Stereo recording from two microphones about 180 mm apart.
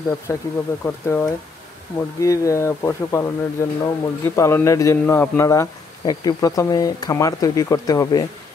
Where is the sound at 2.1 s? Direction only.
20° left (ahead or behind).